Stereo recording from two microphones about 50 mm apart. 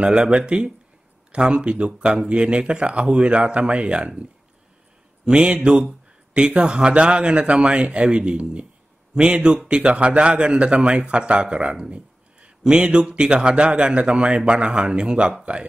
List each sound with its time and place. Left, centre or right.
0.0 s speech: centre
5.2 s speech: centre